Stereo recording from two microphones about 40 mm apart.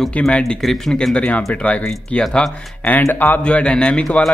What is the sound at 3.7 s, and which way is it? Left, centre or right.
Speech, centre.